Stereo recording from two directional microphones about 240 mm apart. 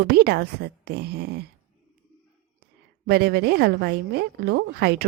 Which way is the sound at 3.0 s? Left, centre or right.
Right.